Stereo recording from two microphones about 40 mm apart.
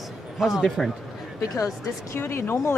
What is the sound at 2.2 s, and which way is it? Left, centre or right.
Speech, left.